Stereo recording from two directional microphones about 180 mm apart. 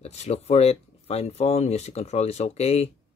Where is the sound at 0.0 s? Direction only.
35° left (ahead or behind).